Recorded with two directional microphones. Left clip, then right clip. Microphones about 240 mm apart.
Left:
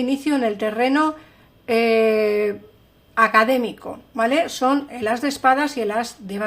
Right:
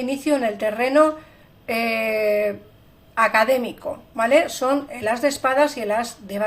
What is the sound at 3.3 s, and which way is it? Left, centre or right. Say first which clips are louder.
Speech: left 1 dB; left.